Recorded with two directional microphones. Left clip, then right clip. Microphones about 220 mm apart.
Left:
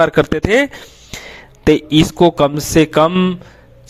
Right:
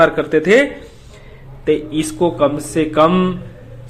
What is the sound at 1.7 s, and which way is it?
A man's voice, 50° left (ahead or behind).